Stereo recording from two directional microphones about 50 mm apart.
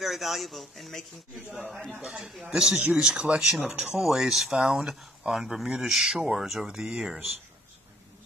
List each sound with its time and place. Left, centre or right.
0.0 s a man's voice: centre
2.5 s speech: centre
3.3 s a man's voice: centre